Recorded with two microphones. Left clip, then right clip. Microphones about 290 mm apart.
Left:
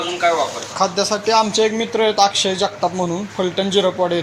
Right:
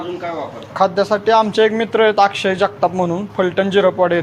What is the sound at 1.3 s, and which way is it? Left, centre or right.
A man's voice, right.